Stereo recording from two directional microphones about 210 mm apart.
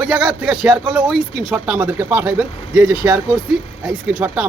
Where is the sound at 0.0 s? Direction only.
5° right (ahead or behind).